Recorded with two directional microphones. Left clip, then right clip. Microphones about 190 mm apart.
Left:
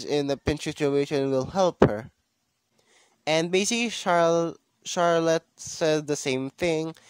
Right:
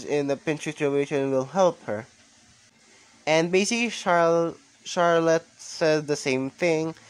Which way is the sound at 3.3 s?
45° left (ahead or behind).